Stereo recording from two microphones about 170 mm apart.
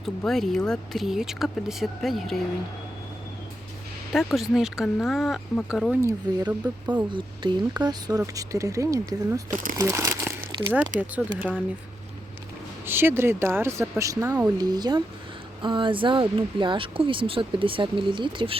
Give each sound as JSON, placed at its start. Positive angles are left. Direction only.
{"t": 0.0, "sound": "speech", "side_deg": 0}
{"t": 4.1, "sound": "speech", "side_deg": 0}
{"t": 6.0, "sound": "speech", "side_deg": -15}
{"t": 7.1, "sound": "speech", "side_deg": -25}
{"t": 12.8, "sound": "speech", "side_deg": -15}